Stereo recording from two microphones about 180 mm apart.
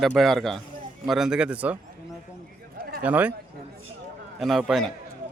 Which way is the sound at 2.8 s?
55° right (ahead or behind).